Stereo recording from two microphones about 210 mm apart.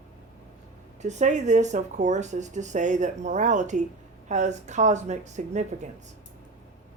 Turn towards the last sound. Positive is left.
turn(degrees=-35)  # may be behind; listen again after turning